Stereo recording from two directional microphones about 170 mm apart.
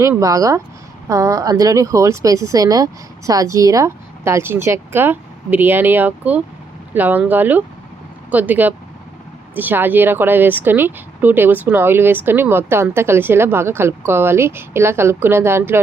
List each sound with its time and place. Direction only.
0.0 s a woman's voice: 20° right (ahead or behind)